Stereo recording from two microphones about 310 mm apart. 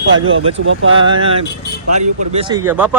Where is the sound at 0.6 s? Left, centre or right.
Right.